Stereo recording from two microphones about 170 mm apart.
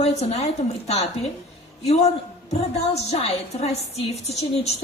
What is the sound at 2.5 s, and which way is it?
A woman's voice, 35° left (ahead or behind).